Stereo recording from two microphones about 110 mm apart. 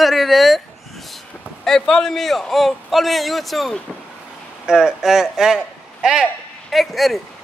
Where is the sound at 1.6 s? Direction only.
5° left (ahead or behind).